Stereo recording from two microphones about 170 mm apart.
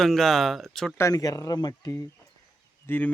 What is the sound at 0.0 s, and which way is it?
Speech, centre (ahead or behind).